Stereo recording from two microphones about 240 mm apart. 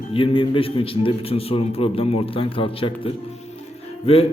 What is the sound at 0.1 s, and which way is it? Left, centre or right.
A man's voice, left.